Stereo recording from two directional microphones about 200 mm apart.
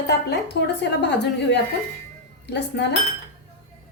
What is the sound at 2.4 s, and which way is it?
Speech, 60° left (ahead or behind).